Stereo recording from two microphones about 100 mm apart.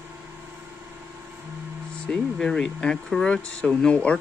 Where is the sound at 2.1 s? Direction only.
10° left (ahead or behind).